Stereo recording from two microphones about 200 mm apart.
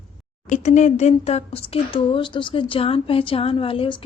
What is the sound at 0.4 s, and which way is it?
Speech, 35° left (ahead or behind).